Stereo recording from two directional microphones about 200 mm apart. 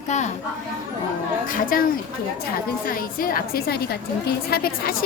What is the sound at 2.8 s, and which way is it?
A woman's voice, 45° left (ahead or behind).